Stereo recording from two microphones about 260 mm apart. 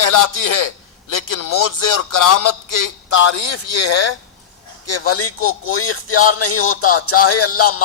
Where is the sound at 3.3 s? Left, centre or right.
Left.